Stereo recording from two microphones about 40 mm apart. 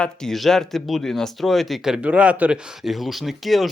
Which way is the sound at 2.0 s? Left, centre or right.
Right.